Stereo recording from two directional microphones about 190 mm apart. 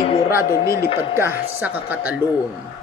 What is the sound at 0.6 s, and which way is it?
Speech, 55° left (ahead or behind).